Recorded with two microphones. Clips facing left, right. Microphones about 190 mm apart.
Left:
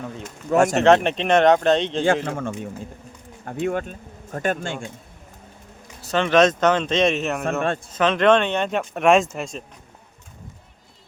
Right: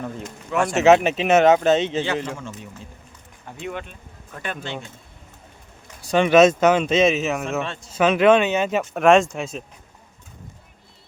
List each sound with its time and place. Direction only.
0.5 s speech: 40° left (ahead or behind)
0.8 s speech: 5° right (ahead or behind)
2.2 s speech: 55° left (ahead or behind)
6.0 s speech: 15° right (ahead or behind)